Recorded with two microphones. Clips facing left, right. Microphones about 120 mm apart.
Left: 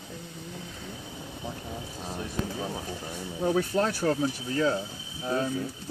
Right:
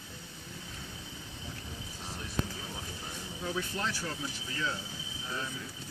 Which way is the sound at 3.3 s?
45° left (ahead or behind).